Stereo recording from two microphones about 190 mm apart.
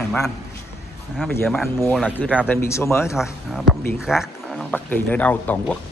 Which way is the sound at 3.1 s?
Centre (ahead or behind).